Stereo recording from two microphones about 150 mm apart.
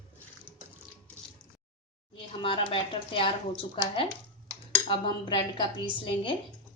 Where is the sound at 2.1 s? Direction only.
35° left (ahead or behind).